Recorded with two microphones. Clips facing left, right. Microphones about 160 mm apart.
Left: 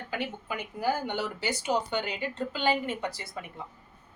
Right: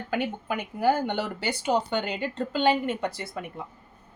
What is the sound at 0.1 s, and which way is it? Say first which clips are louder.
Speech: right 6 dB; 55° right (ahead or behind).